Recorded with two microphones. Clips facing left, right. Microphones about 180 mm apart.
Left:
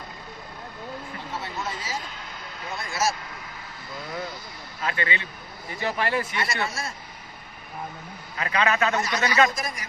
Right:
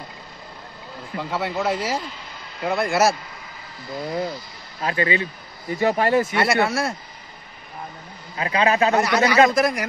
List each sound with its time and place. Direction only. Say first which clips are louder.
1.3 s speech: right 10 dB; 70° right (ahead or behind)
3.9 s a man's voice: right 8 dB; 25° right (ahead or behind)
6.3 s speech: right 9 dB; 65° right (ahead or behind)
8.4 s a man's voice: right 5 dB; 30° right (ahead or behind)
8.9 s speech: right 7 dB; 65° right (ahead or behind)